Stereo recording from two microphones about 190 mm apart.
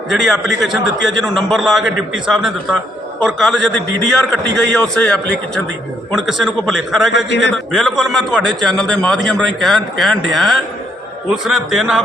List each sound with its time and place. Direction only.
0.1 s a man's voice: centre (ahead or behind)
7.3 s a man's voice: 65° left (ahead or behind)
7.5 s a man's voice: centre (ahead or behind)